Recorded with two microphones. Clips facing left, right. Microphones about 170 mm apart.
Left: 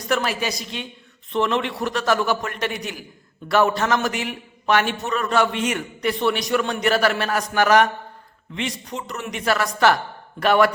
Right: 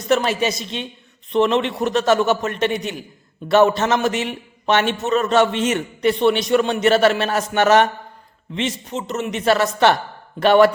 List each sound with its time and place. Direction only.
0.1 s a man's voice: 25° right (ahead or behind)